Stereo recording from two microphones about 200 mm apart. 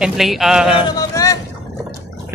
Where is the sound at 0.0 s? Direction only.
Centre (ahead or behind).